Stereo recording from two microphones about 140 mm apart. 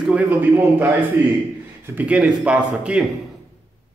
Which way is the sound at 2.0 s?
10° right (ahead or behind).